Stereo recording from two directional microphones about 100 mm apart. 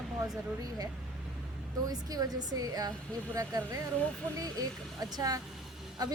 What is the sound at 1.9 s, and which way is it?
A woman's voice, 40° right (ahead or behind).